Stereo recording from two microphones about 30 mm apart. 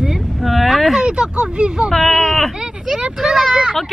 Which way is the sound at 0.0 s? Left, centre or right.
Centre.